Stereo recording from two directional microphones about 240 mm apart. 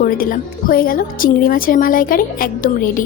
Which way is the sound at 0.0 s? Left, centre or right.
Left.